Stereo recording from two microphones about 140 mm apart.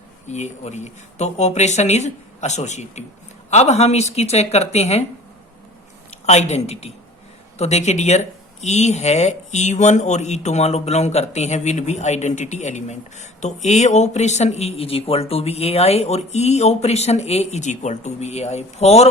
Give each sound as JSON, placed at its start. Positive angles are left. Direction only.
{"t": 0.3, "sound": "speech", "side_deg": 55}
{"t": 6.2, "sound": "speech", "side_deg": 50}